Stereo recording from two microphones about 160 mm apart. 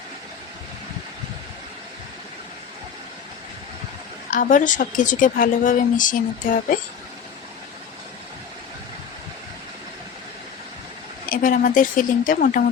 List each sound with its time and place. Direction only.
4.3 s a woman's voice: 55° left (ahead or behind)
11.3 s a woman's voice: 60° left (ahead or behind)